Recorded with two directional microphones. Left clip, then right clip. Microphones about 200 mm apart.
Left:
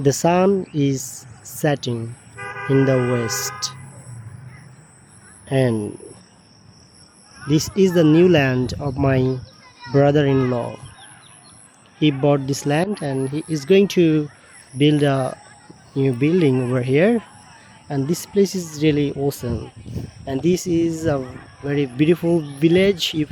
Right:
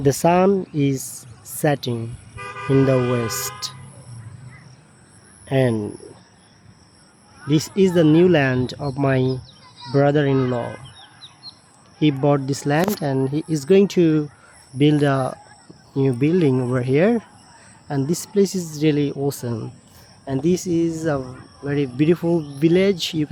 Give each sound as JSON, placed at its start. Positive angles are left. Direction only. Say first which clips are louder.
{"t": 0.0, "sound": "a man's voice", "louder": "even", "side_deg": -5}
{"t": 2.3, "sound": "toot", "louder": "left 2 dB", "side_deg": -55}
{"t": 2.8, "sound": "a man's voice", "louder": "even", "side_deg": -5}
{"t": 5.5, "sound": "a man's voice", "louder": "even", "side_deg": 0}
{"t": 7.4, "sound": "a man's voice", "louder": "left 1 dB", "side_deg": 0}
{"t": 12.2, "sound": "a man's voice", "louder": "left 1 dB", "side_deg": -5}
{"t": 13.7, "sound": "a man's voice", "louder": "left 1 dB", "side_deg": -5}